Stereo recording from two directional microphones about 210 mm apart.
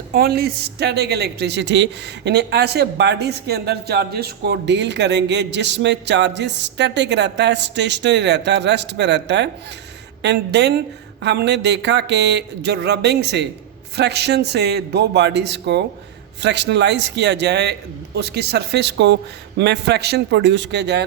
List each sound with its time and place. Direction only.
0.1 s a man's voice: 50° right (ahead or behind)